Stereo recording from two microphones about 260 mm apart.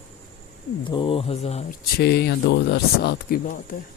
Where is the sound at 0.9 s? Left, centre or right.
Centre.